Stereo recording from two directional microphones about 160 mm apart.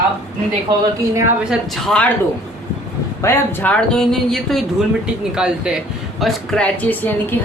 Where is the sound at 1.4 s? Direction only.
Centre (ahead or behind).